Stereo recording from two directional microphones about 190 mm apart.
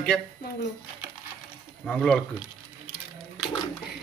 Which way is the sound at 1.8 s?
5° left (ahead or behind).